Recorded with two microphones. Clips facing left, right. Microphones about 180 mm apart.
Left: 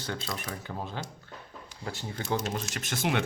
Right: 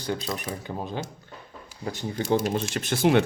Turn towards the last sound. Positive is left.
turn(degrees=-35)  # may be behind; listen again after turning